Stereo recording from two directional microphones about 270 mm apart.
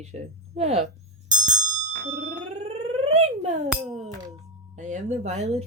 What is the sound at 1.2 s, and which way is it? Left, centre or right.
Music, right.